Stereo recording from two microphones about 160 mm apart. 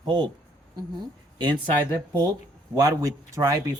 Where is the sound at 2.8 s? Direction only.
20° right (ahead or behind).